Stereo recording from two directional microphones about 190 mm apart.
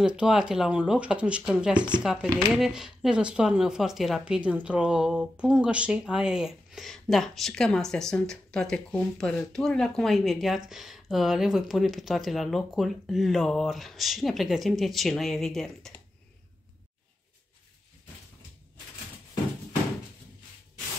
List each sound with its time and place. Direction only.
0.0 s speech: 5° right (ahead or behind)